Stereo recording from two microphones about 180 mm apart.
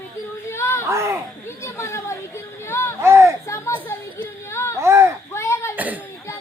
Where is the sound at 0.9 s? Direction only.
15° right (ahead or behind).